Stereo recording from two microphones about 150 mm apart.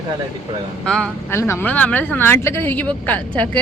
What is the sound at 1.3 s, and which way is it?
Speech, 15° left (ahead or behind).